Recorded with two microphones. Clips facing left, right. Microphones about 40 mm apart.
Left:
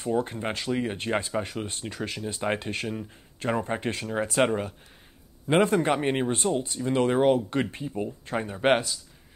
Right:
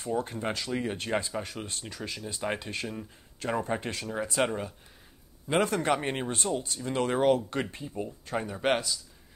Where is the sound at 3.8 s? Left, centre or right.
Left.